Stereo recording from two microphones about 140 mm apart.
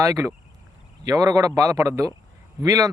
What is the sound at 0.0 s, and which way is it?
Speech, 25° right (ahead or behind).